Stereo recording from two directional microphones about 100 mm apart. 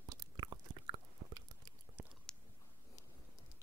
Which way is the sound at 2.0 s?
20° right (ahead or behind).